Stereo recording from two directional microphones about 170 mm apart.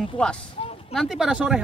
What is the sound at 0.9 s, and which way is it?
Speech, centre (ahead or behind).